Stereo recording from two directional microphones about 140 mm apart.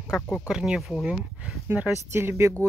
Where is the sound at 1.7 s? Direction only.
15° right (ahead or behind).